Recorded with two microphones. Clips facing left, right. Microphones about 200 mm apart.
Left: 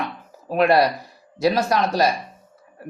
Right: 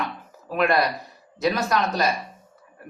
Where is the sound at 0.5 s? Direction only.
35° left (ahead or behind).